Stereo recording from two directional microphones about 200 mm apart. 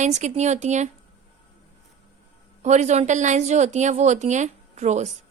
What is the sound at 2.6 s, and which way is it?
A woman's voice, 35° right (ahead or behind).